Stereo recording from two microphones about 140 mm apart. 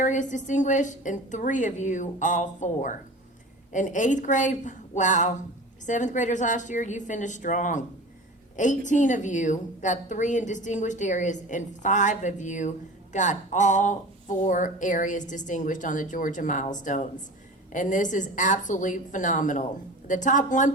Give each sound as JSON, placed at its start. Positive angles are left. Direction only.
{"t": 0.0, "sound": "a woman's voice", "side_deg": 60}